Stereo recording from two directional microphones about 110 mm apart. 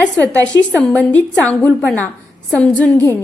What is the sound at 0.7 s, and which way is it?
A woman's voice, 5° left (ahead or behind).